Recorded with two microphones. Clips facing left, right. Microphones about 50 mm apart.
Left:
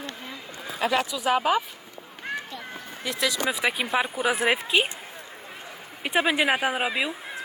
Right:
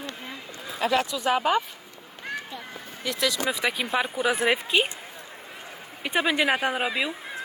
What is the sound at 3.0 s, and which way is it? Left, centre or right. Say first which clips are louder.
Speech: even; centre.